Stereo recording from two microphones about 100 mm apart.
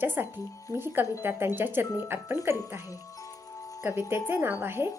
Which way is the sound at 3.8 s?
25° right (ahead or behind).